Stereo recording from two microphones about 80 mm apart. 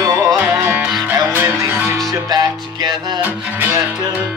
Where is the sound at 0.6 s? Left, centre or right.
Right.